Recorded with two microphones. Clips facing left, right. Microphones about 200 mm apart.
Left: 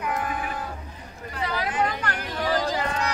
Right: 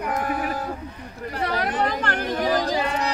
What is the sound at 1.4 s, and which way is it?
Speech, 60° right (ahead or behind).